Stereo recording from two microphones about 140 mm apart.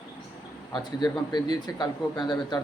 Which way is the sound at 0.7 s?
30° left (ahead or behind).